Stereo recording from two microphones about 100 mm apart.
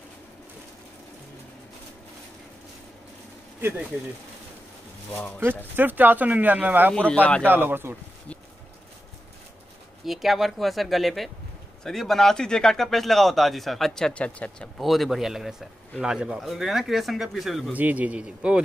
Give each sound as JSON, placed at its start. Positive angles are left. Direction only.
{"t": 5.8, "sound": "speech", "side_deg": -20}
{"t": 7.1, "sound": "a man's voice", "side_deg": 10}
{"t": 7.4, "sound": "speech", "side_deg": -20}
{"t": 10.0, "sound": "speech", "side_deg": 0}
{"t": 14.8, "sound": "speech", "side_deg": 0}
{"t": 17.7, "sound": "speech", "side_deg": -15}